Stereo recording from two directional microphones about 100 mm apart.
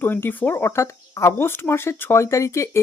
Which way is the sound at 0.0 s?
20° left (ahead or behind).